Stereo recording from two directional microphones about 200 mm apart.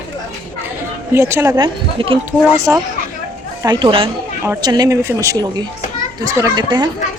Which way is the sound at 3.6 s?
25° right (ahead or behind).